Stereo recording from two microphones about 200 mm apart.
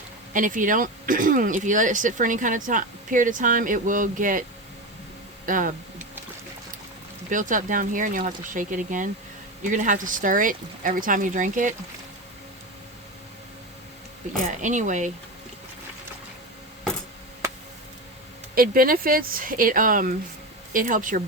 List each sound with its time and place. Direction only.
0.3 s speech: 40° right (ahead or behind)
5.5 s speech: 40° right (ahead or behind)
7.3 s speech: 40° right (ahead or behind)
14.4 s speech: 40° right (ahead or behind)
18.5 s speech: 45° right (ahead or behind)